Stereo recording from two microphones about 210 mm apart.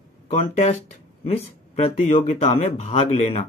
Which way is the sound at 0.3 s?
30° left (ahead or behind).